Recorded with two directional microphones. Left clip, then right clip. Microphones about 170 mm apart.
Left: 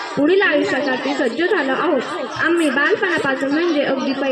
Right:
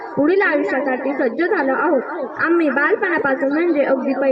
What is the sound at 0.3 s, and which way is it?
A woman's voice, 70° left (ahead or behind).